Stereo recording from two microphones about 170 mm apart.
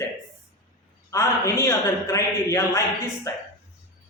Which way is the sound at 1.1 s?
15° left (ahead or behind).